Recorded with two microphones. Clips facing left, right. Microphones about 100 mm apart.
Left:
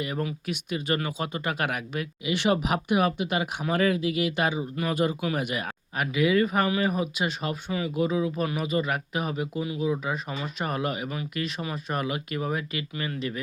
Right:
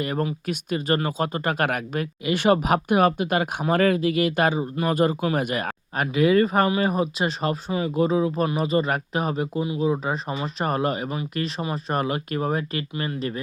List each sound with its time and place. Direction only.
0.0 s speech: 50° right (ahead or behind)